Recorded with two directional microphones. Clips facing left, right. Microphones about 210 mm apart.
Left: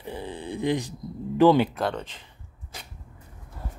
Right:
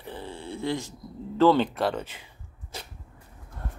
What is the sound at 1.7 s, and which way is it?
Speech, 5° right (ahead or behind).